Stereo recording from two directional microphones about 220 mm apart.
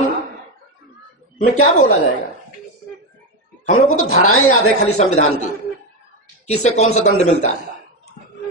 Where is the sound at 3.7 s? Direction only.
75° left (ahead or behind).